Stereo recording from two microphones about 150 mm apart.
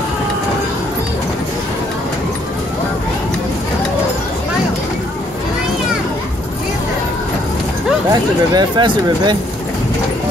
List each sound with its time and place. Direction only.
8.1 s speech: 30° right (ahead or behind)